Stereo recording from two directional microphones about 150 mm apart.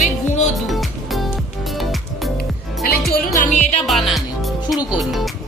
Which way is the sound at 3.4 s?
55° left (ahead or behind).